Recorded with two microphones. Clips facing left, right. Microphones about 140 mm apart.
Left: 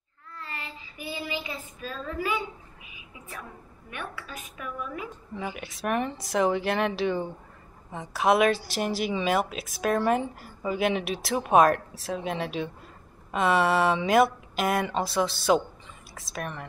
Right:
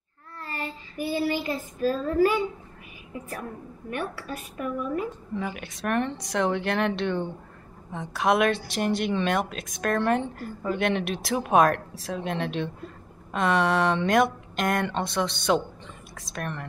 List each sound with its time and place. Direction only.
0.4 s child singing: 40° right (ahead or behind)
1.8 s a woman's voice: 40° right (ahead or behind)
5.3 s a woman's voice: centre (ahead or behind)